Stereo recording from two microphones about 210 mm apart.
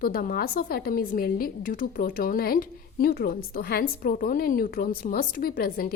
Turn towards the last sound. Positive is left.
turn(degrees=45)  # may be behind; listen again after turning